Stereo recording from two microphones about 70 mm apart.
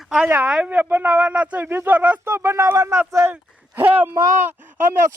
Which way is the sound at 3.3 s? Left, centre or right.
Right.